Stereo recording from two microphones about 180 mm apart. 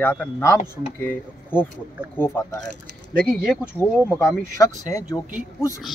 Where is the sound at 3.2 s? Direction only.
Centre (ahead or behind).